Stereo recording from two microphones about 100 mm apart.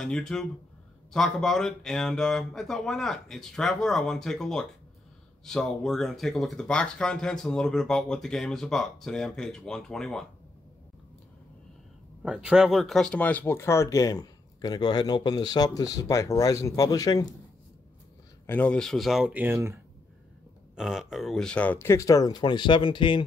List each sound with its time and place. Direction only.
0.0 s speech: 5° left (ahead or behind)
12.2 s speech: 10° right (ahead or behind); by 17.3 s 40° left (ahead or behind)
18.5 s speech: 15° left (ahead or behind)
18.8 s speech: 5° left (ahead or behind)
19.3 s speech: 25° right (ahead or behind)
20.7 s speech: 5° right (ahead or behind); by 21.8 s 15° left (ahead or behind)
21.8 s speech: 30° left (ahead or behind); by 23.2 s 55° left (ahead or behind)